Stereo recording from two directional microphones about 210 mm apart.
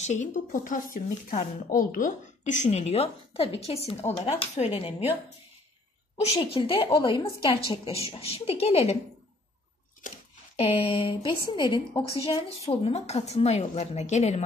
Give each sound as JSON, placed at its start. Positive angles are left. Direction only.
{"t": 0.0, "sound": "a woman's voice", "side_deg": 35}
{"t": 6.1, "sound": "a woman's voice", "side_deg": 30}
{"t": 10.0, "sound": "a woman's voice", "side_deg": 30}